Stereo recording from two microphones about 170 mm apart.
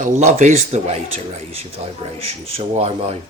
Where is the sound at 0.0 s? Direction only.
45° right (ahead or behind).